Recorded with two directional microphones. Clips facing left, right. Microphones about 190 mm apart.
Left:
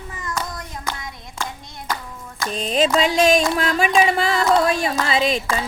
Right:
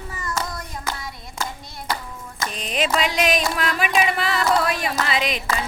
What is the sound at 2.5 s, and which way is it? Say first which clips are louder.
Music: left 5 dB; 30° left (ahead or behind).